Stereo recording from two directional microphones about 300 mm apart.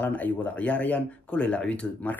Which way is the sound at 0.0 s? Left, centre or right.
Centre.